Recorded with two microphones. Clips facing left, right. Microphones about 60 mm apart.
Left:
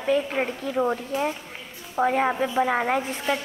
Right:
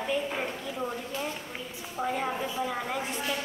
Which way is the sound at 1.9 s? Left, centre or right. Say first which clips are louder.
Left 9 dB; left.